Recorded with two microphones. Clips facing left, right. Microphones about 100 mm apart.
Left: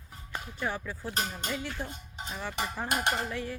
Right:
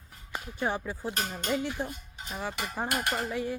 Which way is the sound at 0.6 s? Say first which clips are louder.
Right 4 dB; 20° right (ahead or behind).